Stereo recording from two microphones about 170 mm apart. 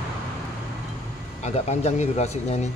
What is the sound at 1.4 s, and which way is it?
Speech, 40° left (ahead or behind).